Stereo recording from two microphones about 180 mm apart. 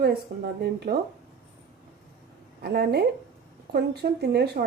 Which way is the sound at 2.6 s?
60° right (ahead or behind).